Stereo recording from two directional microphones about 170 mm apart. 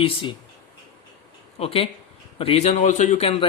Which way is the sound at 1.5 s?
35° left (ahead or behind).